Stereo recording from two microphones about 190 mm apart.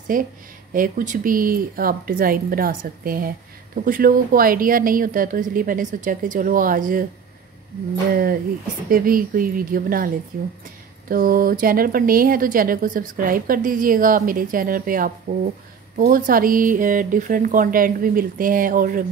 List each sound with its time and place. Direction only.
0.1 s speech: 45° right (ahead or behind)
8.1 s speech: 50° right (ahead or behind)